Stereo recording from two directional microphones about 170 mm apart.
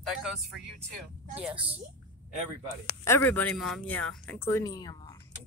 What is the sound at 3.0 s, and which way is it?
Speech, 15° left (ahead or behind).